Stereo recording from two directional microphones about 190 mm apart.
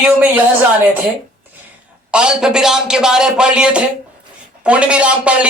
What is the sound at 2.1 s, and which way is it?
A man's voice, 5° right (ahead or behind).